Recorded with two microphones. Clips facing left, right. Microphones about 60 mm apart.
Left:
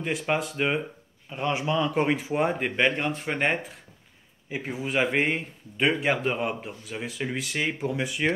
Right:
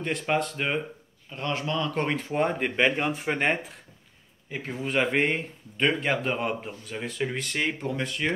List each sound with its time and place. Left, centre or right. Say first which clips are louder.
0.0 s speech: even; centre